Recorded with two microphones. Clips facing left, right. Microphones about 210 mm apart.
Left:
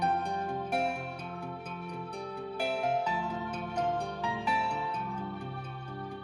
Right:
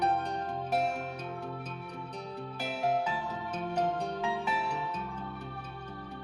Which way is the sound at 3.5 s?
10° left (ahead or behind).